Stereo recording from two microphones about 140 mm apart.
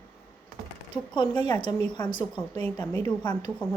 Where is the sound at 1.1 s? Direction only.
35° left (ahead or behind).